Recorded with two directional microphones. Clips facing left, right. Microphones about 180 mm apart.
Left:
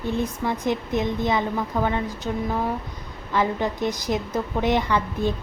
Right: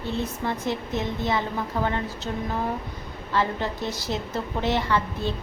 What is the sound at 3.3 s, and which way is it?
A woman's voice, 15° left (ahead or behind).